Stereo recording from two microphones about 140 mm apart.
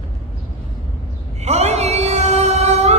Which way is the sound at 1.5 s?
50° right (ahead or behind).